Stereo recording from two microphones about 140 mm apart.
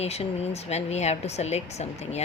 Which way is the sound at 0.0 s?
50° left (ahead or behind).